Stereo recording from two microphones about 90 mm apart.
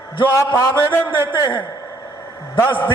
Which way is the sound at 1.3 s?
65° left (ahead or behind).